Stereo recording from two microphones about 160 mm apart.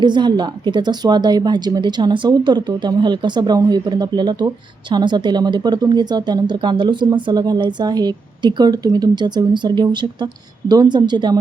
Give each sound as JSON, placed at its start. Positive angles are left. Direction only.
{"t": 0.0, "sound": "speech", "side_deg": -30}